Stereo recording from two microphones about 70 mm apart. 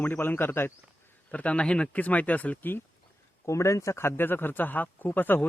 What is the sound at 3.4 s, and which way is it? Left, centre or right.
Speech, left.